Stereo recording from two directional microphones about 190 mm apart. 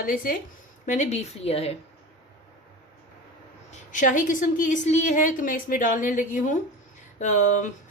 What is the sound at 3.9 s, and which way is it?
A woman's voice, 45° left (ahead or behind).